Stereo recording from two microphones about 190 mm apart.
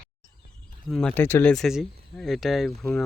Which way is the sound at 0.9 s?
5° left (ahead or behind).